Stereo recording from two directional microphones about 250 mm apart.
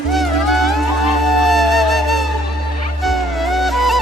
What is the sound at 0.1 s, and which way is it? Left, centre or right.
Music, centre.